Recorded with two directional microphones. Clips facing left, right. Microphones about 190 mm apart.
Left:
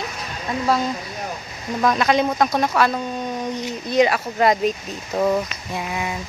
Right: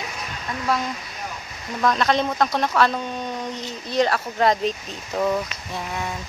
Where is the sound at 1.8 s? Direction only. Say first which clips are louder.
Left 2 dB; 10° left (ahead or behind).